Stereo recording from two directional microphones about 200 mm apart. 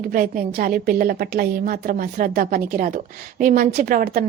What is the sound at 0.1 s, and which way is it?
A woman's voice, 45° right (ahead or behind).